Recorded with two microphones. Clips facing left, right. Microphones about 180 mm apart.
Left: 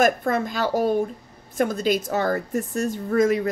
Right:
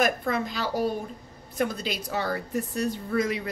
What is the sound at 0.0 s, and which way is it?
A woman's voice, 45° left (ahead or behind).